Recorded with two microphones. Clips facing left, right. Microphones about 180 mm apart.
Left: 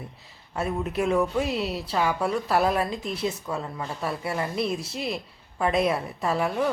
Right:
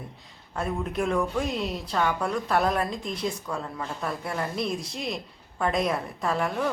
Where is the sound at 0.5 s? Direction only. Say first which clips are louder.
Left 2 dB; 5° left (ahead or behind).